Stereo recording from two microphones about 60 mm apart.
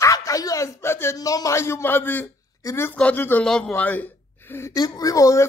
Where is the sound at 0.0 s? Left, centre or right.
Left.